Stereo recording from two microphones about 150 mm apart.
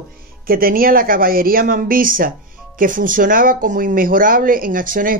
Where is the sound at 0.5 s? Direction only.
75° right (ahead or behind).